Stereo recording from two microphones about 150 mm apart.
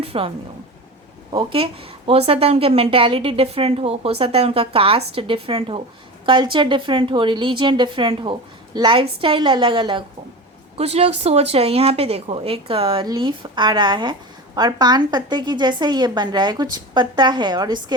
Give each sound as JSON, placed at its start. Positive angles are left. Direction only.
{"t": 0.0, "sound": "speech", "side_deg": -40}
{"t": 1.3, "sound": "speech", "side_deg": -35}
{"t": 10.8, "sound": "a woman's voice", "side_deg": -45}